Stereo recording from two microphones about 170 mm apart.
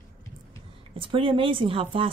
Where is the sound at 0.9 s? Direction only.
30° right (ahead or behind).